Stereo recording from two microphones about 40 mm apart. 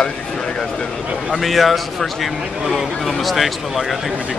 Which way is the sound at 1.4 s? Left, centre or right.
Centre.